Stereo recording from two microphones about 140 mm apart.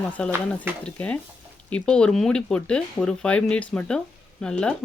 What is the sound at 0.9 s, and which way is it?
Speech, 10° left (ahead or behind).